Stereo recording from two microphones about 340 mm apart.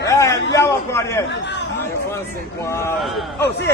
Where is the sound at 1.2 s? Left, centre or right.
Left.